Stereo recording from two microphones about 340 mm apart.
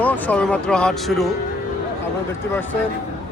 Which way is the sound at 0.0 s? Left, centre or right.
Centre.